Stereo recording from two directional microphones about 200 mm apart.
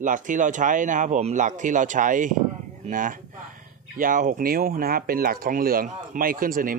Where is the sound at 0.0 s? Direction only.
40° right (ahead or behind).